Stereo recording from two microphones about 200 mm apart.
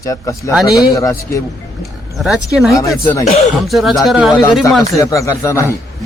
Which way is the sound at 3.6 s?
Centre (ahead or behind).